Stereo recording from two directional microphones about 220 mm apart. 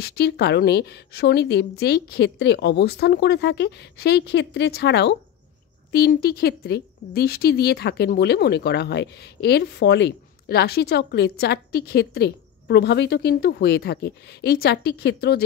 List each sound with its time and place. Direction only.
0.0 s a woman's voice: 50° left (ahead or behind)